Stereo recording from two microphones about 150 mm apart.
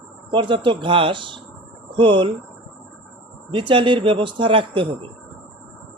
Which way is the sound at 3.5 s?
35° right (ahead or behind).